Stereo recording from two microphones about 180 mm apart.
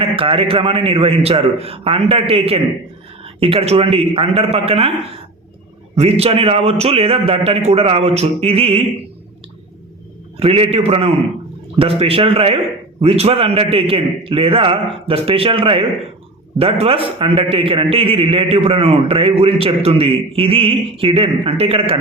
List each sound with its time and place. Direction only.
0.0 s a man's voice: 30° right (ahead or behind)
6.0 s a man's voice: 35° right (ahead or behind)
10.4 s a man's voice: 35° right (ahead or behind)